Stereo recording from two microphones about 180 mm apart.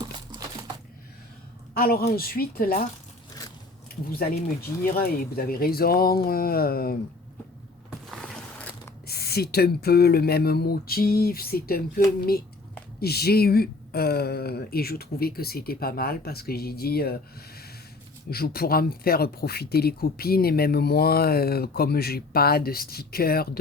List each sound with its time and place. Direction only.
0.0 s a sound: 20° right (ahead or behind)
1.7 s speech: 55° left (ahead or behind)
4.8 s speech: 55° left (ahead or behind)
7.9 s mechanisms: centre (ahead or behind)
9.0 s speech: 60° left (ahead or behind)